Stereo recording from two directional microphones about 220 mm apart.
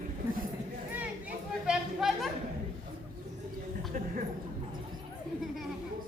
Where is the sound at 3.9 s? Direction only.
40° right (ahead or behind).